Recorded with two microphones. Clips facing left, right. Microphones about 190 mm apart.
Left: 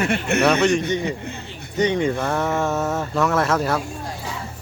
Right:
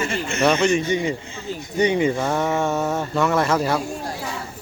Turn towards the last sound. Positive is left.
turn(degrees=0)  # may be behind; listen again after turning